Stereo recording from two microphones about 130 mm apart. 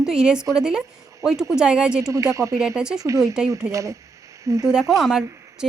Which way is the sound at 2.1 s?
25° right (ahead or behind).